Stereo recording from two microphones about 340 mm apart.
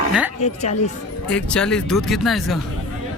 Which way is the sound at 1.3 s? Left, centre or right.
Centre.